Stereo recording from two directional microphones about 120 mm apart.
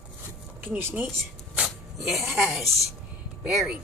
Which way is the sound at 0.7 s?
20° right (ahead or behind).